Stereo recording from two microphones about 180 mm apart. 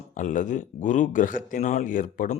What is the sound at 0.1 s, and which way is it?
Speech, 45° left (ahead or behind).